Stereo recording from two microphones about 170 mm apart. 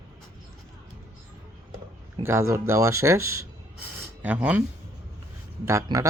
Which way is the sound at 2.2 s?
15° right (ahead or behind).